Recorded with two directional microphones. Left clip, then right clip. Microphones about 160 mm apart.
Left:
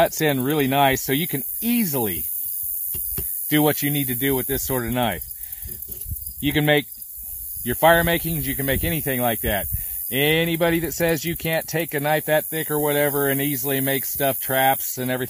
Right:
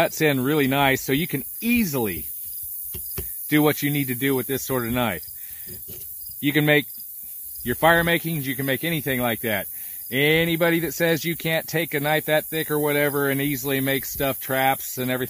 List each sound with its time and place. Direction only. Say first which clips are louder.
0.0 s speech: left 1 dB; 30° left (ahead or behind)
3.4 s speech: even; 30° left (ahead or behind)
6.4 s speech: even; 30° left (ahead or behind)